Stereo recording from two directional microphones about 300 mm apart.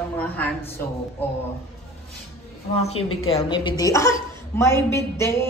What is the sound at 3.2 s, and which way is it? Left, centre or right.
Speech, centre.